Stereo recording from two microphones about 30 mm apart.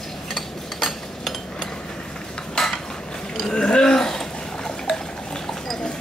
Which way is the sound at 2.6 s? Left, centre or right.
Left.